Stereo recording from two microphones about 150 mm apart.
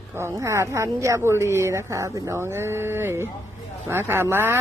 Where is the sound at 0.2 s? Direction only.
20° right (ahead or behind).